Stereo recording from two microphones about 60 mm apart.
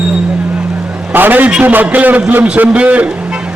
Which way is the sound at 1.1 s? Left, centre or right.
Right.